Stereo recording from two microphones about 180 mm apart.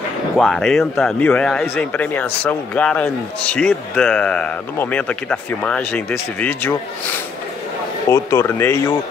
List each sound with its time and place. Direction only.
0.4 s a man's voice: centre (ahead or behind)
8.1 s a man's voice: 15° left (ahead or behind)